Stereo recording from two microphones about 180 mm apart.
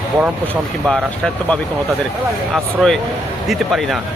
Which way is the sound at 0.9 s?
5° left (ahead or behind).